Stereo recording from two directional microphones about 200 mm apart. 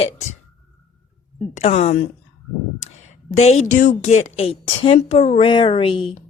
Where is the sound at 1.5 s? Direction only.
35° left (ahead or behind).